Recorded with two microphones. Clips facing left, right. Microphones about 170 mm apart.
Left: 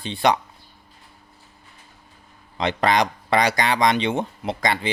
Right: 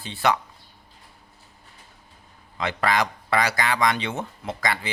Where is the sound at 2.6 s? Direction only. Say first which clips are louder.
Left 4 dB; 20° left (ahead or behind).